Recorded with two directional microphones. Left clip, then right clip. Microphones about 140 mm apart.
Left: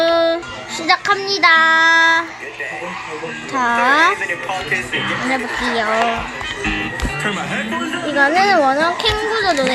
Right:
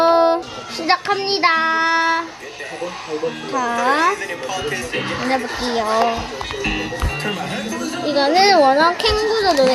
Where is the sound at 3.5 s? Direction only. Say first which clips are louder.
Left 4 dB; 15° left (ahead or behind).